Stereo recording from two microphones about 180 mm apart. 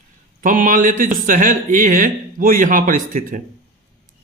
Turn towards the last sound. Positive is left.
turn(degrees=-50)  # may be behind; listen again after turning